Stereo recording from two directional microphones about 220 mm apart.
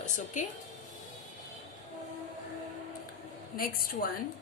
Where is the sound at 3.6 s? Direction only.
40° left (ahead or behind).